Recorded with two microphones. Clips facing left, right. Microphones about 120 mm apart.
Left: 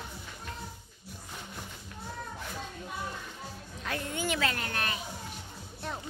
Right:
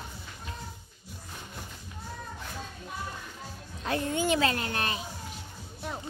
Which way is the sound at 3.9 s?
25° right (ahead or behind).